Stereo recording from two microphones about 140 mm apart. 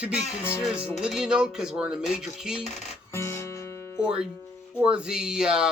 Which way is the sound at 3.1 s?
20° left (ahead or behind).